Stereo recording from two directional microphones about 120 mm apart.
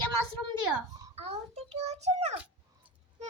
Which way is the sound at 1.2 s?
60° right (ahead or behind).